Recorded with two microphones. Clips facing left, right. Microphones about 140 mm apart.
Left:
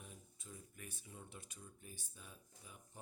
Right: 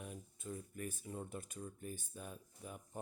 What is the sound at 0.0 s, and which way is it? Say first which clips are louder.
Speech: right 9 dB; 60° right (ahead or behind).